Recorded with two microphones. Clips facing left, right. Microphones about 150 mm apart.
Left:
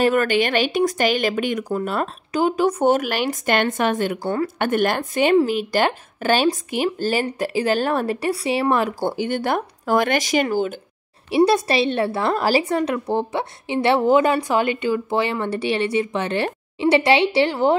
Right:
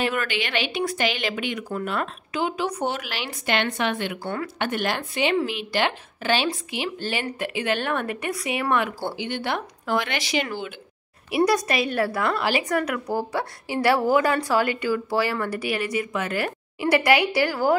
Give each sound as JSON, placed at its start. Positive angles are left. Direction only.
{"t": 0.0, "sound": "speech", "side_deg": 40}
{"t": 11.2, "sound": "a woman's voice", "side_deg": 30}